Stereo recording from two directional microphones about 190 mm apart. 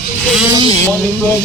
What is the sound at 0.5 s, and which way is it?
Speech, 25° right (ahead or behind).